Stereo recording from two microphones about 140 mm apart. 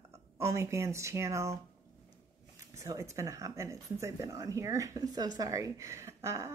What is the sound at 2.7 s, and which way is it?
Speech, 20° right (ahead or behind).